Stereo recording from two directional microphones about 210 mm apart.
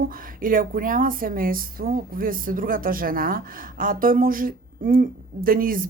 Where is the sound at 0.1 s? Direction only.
40° right (ahead or behind).